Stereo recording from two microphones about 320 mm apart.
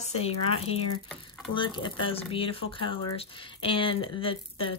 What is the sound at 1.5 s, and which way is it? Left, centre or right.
Speech, centre.